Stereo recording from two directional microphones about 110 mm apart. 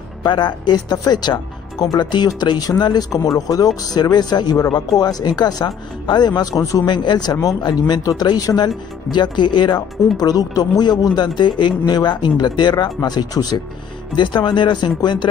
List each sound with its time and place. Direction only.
0.2 s speech: 45° left (ahead or behind)
6.9 s speech: 40° left (ahead or behind)